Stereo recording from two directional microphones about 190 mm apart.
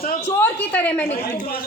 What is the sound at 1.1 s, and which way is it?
Speech, 45° left (ahead or behind).